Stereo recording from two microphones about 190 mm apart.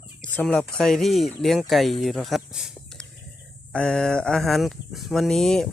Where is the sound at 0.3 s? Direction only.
5° left (ahead or behind).